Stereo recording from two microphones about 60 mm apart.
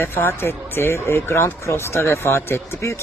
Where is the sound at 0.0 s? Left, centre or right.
Left.